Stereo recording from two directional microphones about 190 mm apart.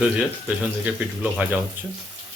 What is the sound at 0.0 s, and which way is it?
Speech, 5° right (ahead or behind).